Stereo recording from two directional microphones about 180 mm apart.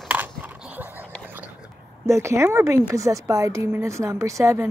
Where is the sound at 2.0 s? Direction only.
15° right (ahead or behind).